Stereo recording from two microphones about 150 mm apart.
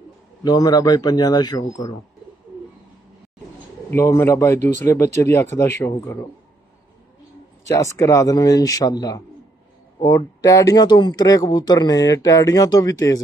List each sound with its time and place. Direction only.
0.4 s speech: 25° left (ahead or behind)
3.9 s speech: 15° left (ahead or behind)
7.6 s speech: 20° left (ahead or behind)